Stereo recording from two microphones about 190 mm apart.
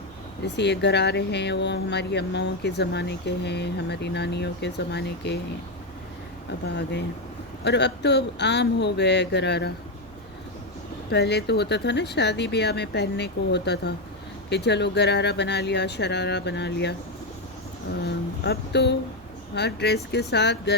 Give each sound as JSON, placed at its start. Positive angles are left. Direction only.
{"t": 0.4, "sound": "speech", "side_deg": 65}
{"t": 6.7, "sound": "speech", "side_deg": 65}
{"t": 11.1, "sound": "speech", "side_deg": 60}
{"t": 18.0, "sound": "speech", "side_deg": 60}